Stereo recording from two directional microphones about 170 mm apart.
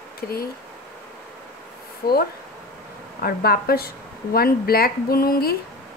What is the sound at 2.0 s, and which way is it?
Speech, 60° left (ahead or behind).